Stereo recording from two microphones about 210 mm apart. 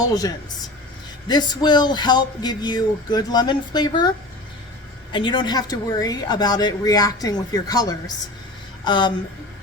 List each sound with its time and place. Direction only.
0.0 s a woman's voice: 15° left (ahead or behind)
5.1 s a woman's voice: 20° left (ahead or behind)